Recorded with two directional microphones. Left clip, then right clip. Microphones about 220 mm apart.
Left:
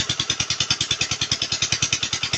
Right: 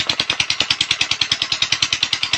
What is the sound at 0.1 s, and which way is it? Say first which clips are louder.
Vehicle: right 5 dB; 40° left (ahead or behind).